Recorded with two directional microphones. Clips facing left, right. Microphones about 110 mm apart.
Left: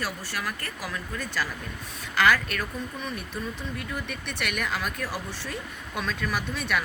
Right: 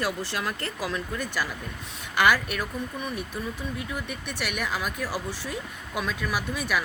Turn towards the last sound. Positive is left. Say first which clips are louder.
# right 1 dB
turn(degrees=-5)  # may be behind; listen again after turning